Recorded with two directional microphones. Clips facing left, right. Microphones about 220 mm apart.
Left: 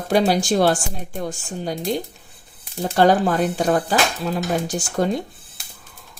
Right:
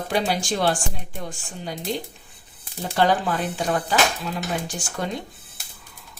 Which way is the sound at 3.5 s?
40° left (ahead or behind).